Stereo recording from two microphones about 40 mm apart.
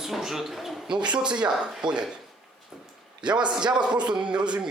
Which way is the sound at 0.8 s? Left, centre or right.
Right.